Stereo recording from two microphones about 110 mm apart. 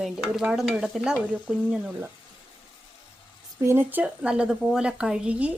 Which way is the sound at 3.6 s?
20° right (ahead or behind).